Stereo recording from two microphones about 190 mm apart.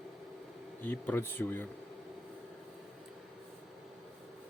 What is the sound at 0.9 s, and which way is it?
Speech, 10° left (ahead or behind).